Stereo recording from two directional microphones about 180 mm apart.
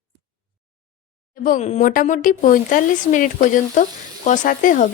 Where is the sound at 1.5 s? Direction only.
50° left (ahead or behind).